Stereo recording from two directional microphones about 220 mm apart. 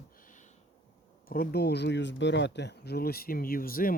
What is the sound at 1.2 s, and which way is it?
Speech, 40° left (ahead or behind).